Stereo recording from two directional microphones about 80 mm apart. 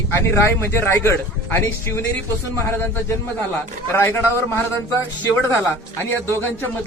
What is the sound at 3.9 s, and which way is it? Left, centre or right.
Speech, left.